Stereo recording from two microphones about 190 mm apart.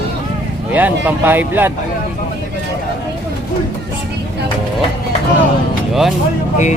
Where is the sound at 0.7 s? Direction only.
10° right (ahead or behind).